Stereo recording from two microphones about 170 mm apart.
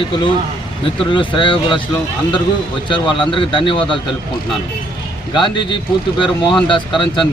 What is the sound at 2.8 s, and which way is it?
Speech, 30° left (ahead or behind).